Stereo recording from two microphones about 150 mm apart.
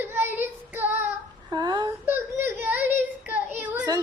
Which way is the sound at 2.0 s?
15° right (ahead or behind).